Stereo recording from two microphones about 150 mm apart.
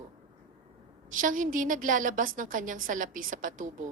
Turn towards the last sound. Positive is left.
turn(degrees=-60)  # may be behind; listen again after turning